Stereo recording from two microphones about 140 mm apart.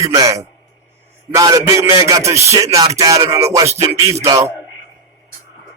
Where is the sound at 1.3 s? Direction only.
25° right (ahead or behind).